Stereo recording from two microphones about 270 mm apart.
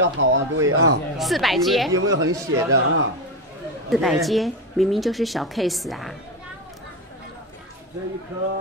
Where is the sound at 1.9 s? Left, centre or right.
Centre.